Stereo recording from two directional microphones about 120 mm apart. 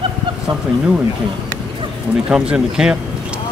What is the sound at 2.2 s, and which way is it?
Speech, 5° right (ahead or behind).